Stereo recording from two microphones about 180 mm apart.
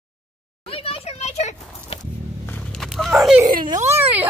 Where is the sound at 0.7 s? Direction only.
30° left (ahead or behind).